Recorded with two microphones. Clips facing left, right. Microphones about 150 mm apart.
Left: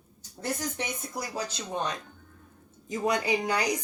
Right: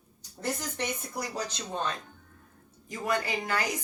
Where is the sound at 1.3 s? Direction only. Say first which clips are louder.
Left 3 dB; 10° left (ahead or behind).